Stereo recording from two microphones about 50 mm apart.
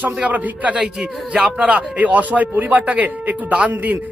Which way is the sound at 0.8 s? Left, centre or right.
Centre.